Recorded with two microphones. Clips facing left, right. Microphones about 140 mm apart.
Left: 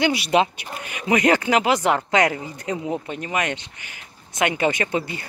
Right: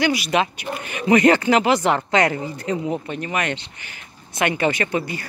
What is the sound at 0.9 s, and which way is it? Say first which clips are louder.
Speech: right 4 dB; 10° left (ahead or behind).